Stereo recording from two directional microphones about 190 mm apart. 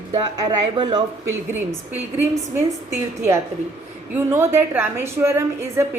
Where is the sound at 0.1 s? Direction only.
20° right (ahead or behind).